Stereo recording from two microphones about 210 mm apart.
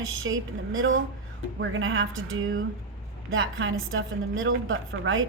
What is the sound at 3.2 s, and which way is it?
A woman's voice, 65° right (ahead or behind).